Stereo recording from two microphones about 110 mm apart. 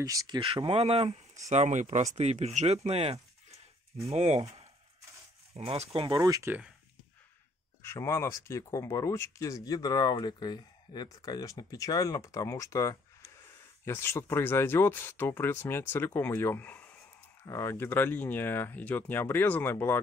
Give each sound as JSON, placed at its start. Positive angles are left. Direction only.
{"t": 0.0, "sound": "speech", "side_deg": -35}
{"t": 0.6, "sound": "speech", "side_deg": -60}
{"t": 1.5, "sound": "speech", "side_deg": -90}
{"t": 2.1, "sound": "speech", "side_deg": -80}
{"t": 6.1, "sound": "speech", "side_deg": -30}
{"t": 7.8, "sound": "speech", "side_deg": 25}